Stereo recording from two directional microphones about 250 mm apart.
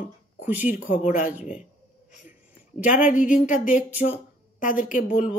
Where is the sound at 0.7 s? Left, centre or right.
Left.